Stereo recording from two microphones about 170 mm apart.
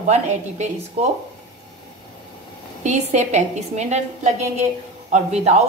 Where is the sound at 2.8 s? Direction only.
40° right (ahead or behind).